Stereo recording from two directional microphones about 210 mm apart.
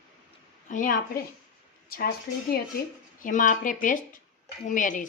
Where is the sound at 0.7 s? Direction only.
40° left (ahead or behind).